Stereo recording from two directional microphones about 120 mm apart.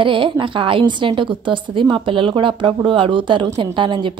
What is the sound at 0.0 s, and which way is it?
A woman's voice, 45° right (ahead or behind).